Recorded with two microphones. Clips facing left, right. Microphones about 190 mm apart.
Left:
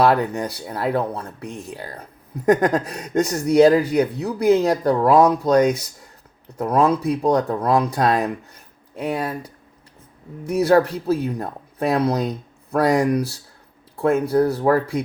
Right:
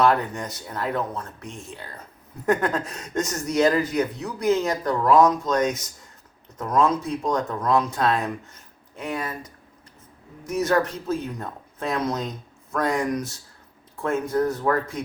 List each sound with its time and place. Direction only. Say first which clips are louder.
0.0 s speech: left 3 dB; 35° left (ahead or behind)
10.5 s speech: left 6 dB; 35° left (ahead or behind)